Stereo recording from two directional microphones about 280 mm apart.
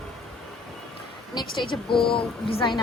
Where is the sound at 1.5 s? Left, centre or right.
Centre.